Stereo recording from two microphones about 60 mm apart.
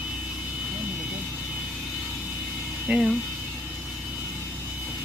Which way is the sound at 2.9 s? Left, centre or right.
Centre.